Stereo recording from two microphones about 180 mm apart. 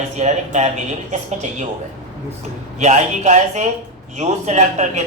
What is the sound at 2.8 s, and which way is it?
Speech, 40° right (ahead or behind).